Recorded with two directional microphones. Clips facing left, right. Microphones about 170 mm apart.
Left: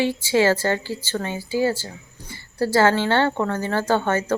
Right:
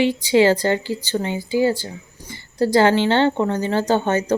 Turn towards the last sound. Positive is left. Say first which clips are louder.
# right 2 dB
turn(degrees=-15)  # may be behind; listen again after turning